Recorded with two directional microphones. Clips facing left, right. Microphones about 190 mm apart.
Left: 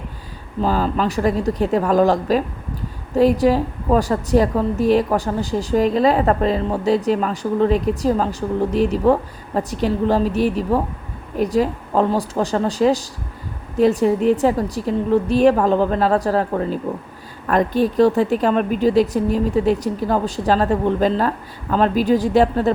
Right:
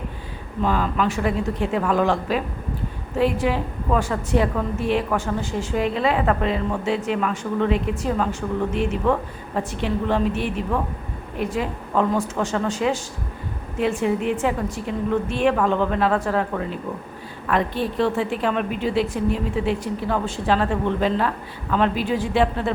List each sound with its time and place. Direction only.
0.6 s a woman's voice: 35° left (ahead or behind)